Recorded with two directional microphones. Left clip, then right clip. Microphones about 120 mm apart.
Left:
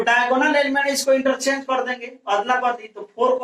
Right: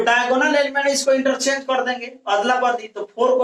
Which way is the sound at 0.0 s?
30° right (ahead or behind).